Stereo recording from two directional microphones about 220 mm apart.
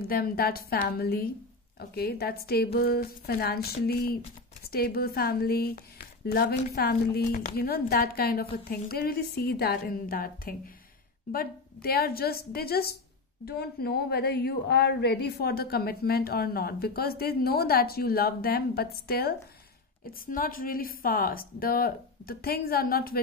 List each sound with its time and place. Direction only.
0.1 s a woman's voice: 45° left (ahead or behind)